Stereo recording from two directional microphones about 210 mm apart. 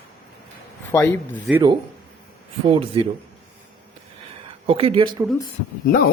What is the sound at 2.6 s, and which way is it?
Speech, 25° right (ahead or behind).